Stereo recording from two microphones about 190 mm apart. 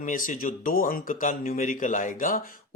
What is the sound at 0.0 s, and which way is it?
Speech, 45° left (ahead or behind).